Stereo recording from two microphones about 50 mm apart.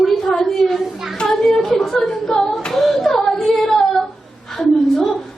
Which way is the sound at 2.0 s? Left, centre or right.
Centre.